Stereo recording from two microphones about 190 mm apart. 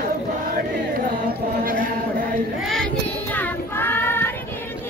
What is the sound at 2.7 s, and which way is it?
Child singing, 5° left (ahead or behind).